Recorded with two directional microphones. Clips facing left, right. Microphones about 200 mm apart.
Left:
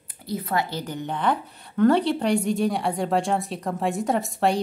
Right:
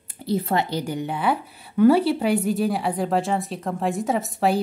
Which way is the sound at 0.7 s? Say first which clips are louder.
Right 4 dB; 15° right (ahead or behind).